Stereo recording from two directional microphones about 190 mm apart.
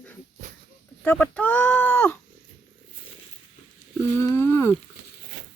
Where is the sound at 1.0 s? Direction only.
10° left (ahead or behind).